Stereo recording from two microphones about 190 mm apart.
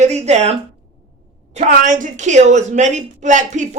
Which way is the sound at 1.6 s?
40° right (ahead or behind).